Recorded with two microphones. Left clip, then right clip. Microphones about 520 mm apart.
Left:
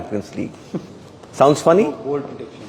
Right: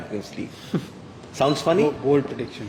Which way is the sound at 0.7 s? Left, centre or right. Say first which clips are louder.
Right 1 dB; right.